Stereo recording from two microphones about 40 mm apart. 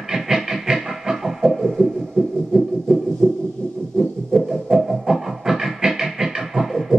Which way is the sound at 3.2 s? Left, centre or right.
Centre.